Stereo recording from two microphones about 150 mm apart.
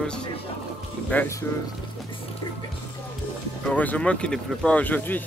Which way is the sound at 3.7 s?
10° left (ahead or behind).